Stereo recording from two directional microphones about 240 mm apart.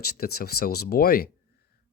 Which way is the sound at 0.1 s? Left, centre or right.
Left.